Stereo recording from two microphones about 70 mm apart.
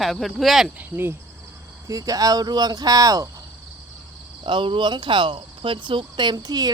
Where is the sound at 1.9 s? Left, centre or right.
Right.